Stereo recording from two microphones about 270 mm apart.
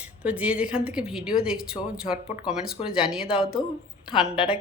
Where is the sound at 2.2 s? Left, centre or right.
Left.